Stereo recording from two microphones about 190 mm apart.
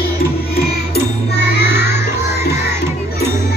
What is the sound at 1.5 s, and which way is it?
Music, 60° left (ahead or behind).